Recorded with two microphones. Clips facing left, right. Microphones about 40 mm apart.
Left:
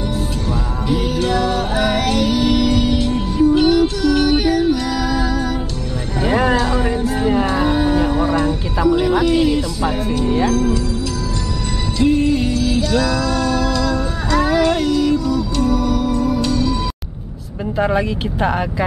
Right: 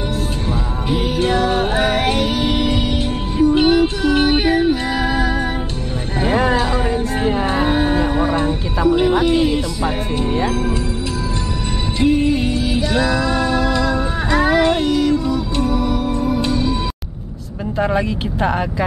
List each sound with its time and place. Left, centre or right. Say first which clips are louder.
0.5 s music: left 1 dB; right
6.5 s music: even; centre
8.0 s a sound: left 1 dB; centre
8.8 s music: even; centre
10.5 s speech: left 3 dB; right
12.0 s music: even; right
17.7 s speech: left 1 dB; centre